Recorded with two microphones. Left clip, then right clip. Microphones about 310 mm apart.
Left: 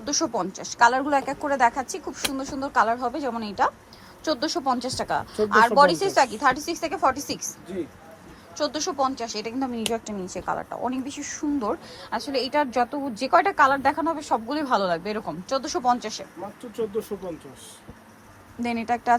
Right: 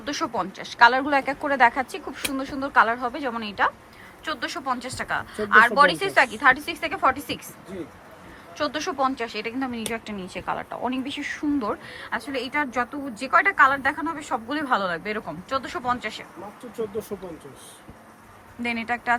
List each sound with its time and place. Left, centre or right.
0.0 s a woman's voice: centre
8.5 s a woman's voice: centre
16.7 s speech: centre
18.6 s a woman's voice: centre